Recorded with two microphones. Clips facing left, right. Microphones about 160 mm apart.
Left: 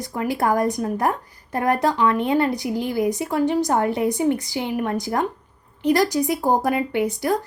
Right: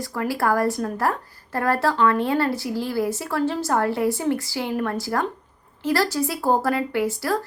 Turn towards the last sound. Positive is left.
turn(degrees=20)  # may be behind; listen again after turning